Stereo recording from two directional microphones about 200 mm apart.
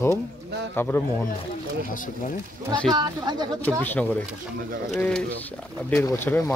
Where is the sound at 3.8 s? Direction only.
10° left (ahead or behind).